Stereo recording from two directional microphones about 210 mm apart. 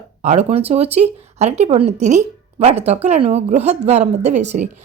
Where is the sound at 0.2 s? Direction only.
30° right (ahead or behind).